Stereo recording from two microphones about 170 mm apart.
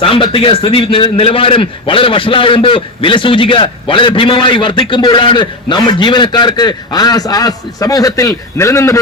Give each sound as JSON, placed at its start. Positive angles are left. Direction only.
{"t": 0.0, "sound": "a man's voice", "side_deg": 30}